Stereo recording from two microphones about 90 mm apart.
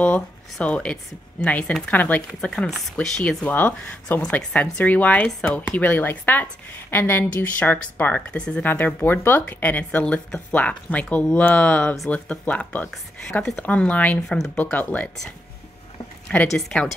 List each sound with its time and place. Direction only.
0.0 s speech: 15° left (ahead or behind)
2.5 s speech: 5° left (ahead or behind)
12.9 s speech: 5° left (ahead or behind)
16.5 s a woman's voice: 5° left (ahead or behind)